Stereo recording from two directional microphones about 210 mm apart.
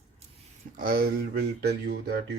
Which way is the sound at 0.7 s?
45° right (ahead or behind).